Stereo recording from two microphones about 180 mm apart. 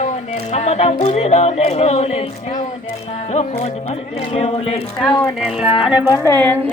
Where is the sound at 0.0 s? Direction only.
35° left (ahead or behind).